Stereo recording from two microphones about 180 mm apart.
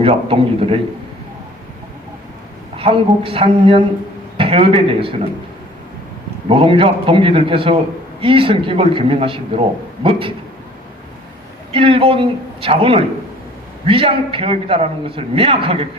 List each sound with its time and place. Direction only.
0.0 s a man's voice: 30° right (ahead or behind)
2.7 s a man's voice: 30° right (ahead or behind)
6.5 s a man's voice: 30° right (ahead or behind)
11.7 s a man's voice: 30° right (ahead or behind)